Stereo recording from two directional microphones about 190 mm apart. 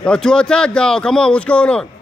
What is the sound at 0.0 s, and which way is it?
Speech, 5° left (ahead or behind).